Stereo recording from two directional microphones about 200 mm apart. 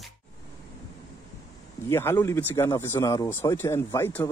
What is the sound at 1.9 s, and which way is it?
Speech, 10° left (ahead or behind).